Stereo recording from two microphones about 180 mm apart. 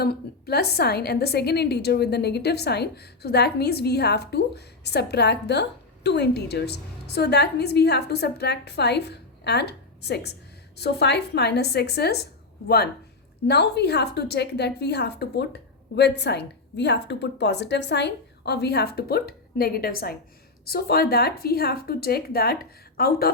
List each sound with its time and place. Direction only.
0.0 s a woman's voice: 60° left (ahead or behind)